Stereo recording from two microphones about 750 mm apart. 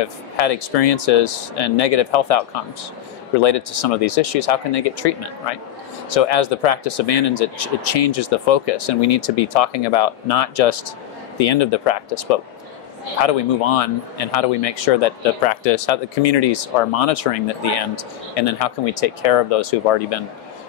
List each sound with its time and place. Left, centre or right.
0.0 s speech: left
3.4 s speech: left